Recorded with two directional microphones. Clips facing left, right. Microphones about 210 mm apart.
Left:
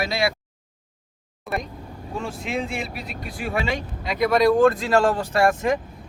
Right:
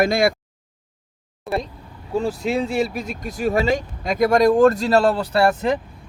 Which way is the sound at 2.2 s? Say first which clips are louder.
Right 7 dB; 35° right (ahead or behind).